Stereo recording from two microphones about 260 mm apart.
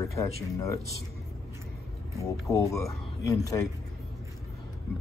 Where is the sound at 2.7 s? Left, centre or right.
Centre.